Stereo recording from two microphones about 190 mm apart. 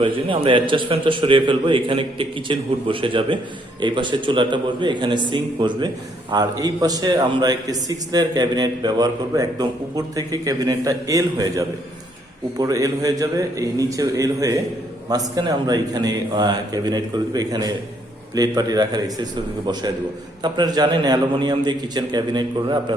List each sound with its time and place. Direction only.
0.0 s a man's voice: 25° right (ahead or behind)
20.4 s a man's voice: 20° right (ahead or behind)